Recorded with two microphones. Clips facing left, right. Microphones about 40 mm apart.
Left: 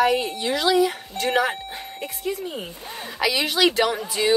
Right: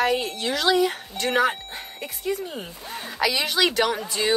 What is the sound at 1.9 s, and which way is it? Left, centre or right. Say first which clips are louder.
Speech: right 1 dB; centre.